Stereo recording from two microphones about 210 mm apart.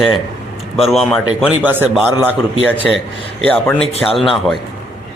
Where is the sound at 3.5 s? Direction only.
5° left (ahead or behind).